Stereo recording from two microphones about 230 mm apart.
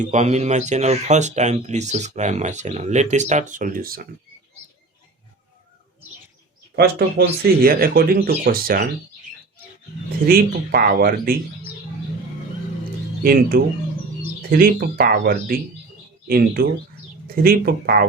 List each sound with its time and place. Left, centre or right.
0.0 s speech: right
6.7 s speech: right
10.2 s speech: right
13.2 s speech: right